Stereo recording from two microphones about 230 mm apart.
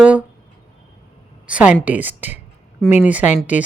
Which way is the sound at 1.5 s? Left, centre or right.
Centre.